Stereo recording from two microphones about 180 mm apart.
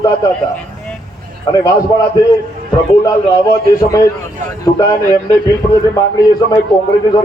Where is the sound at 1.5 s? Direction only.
20° left (ahead or behind).